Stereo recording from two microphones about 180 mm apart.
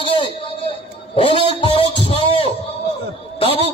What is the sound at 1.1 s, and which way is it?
Speech, 25° left (ahead or behind).